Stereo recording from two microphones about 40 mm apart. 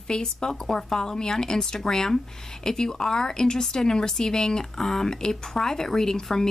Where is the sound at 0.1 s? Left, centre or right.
Centre.